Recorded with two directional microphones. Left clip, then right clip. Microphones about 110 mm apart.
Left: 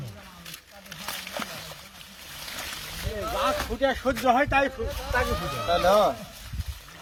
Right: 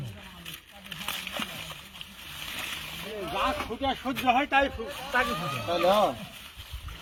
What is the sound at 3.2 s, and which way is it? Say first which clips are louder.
Speech: left 3 dB; 25° left (ahead or behind).